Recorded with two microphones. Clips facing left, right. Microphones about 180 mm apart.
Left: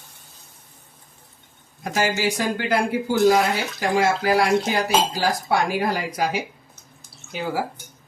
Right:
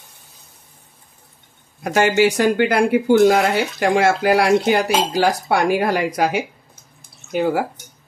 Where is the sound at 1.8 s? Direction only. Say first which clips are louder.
Right 8 dB; 65° right (ahead or behind).